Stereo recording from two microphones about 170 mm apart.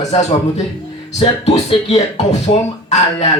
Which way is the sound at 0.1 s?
40° left (ahead or behind).